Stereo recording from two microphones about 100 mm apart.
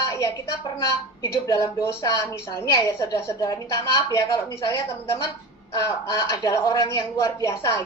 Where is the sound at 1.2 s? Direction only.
30° left (ahead or behind).